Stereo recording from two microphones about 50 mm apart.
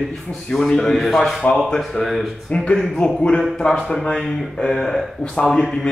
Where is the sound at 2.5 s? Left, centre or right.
Centre.